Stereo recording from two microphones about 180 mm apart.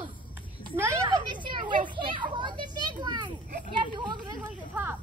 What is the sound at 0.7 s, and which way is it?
Children playing, 15° right (ahead or behind).